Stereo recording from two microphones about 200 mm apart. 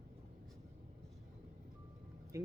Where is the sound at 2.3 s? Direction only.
15° right (ahead or behind).